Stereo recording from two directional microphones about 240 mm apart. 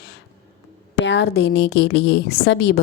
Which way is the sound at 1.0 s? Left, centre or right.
Left.